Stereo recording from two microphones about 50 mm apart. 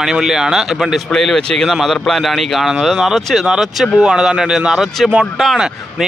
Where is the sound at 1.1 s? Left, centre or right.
Centre.